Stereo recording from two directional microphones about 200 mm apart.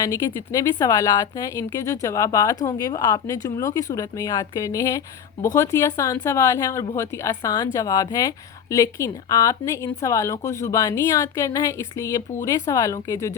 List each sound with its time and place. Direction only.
0.0 s a woman's voice: 15° left (ahead or behind)